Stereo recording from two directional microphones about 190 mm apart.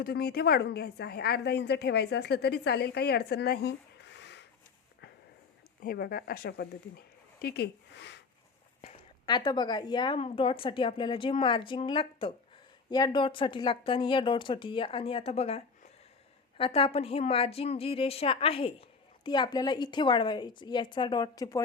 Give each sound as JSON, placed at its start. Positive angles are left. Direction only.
{"t": 0.0, "sound": "a woman's voice", "side_deg": 55}
{"t": 5.8, "sound": "speech", "side_deg": 50}
{"t": 8.8, "sound": "a woman's voice", "side_deg": 25}